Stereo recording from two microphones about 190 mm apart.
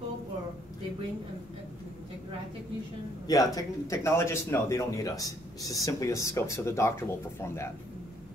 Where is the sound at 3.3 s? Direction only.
20° left (ahead or behind).